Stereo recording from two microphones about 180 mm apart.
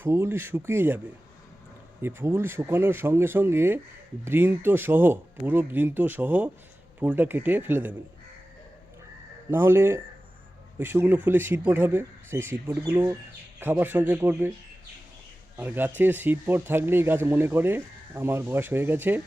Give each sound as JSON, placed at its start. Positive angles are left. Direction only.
{"t": 0.0, "sound": "speech", "side_deg": -15}
{"t": 9.5, "sound": "speech", "side_deg": -10}
{"t": 15.5, "sound": "speech", "side_deg": -10}